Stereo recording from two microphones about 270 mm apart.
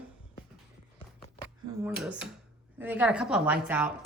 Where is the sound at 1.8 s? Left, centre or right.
Centre.